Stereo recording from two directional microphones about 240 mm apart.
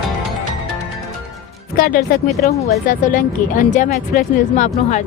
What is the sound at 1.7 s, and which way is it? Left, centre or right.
A woman's voice, left.